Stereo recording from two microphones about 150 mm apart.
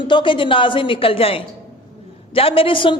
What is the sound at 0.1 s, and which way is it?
A man's voice, 35° left (ahead or behind).